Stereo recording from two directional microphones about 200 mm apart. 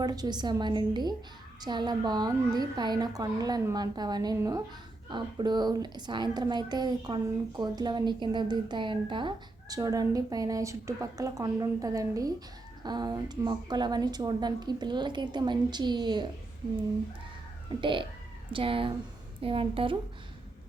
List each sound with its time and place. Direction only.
0.0 s a woman's voice: 20° right (ahead or behind)
17.7 s a woman's voice: 25° right (ahead or behind)